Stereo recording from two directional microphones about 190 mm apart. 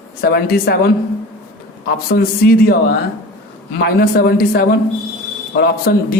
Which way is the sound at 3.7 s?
55° left (ahead or behind).